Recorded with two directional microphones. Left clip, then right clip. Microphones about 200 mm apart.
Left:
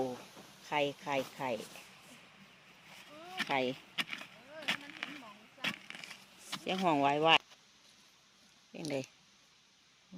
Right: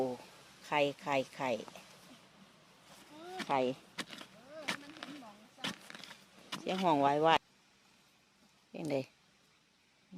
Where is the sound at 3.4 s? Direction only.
5° right (ahead or behind).